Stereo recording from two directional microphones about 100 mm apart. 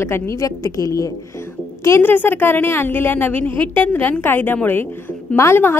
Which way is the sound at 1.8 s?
25° left (ahead or behind).